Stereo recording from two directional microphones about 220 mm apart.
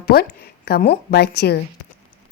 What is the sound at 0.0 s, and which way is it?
A woman's voice, 45° left (ahead or behind).